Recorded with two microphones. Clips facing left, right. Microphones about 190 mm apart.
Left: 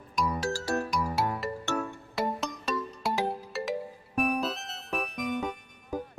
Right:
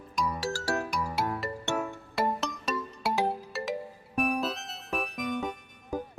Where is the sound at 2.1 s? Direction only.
Centre (ahead or behind).